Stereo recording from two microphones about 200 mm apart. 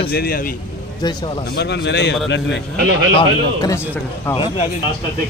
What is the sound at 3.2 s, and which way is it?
A man's voice, 20° left (ahead or behind).